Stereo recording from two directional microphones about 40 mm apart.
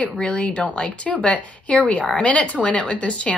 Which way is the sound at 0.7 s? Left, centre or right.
Left.